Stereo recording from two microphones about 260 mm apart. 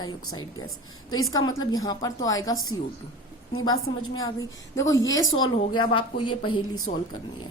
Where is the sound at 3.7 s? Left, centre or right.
Left.